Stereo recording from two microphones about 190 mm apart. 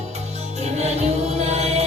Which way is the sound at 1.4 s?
35° right (ahead or behind).